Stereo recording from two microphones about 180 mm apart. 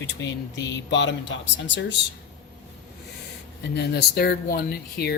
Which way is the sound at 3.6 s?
65° left (ahead or behind).